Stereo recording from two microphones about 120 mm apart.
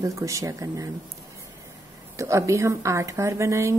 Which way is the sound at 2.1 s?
25° right (ahead or behind).